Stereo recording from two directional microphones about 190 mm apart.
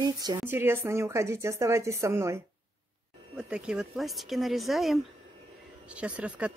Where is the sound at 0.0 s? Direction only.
20° right (ahead or behind).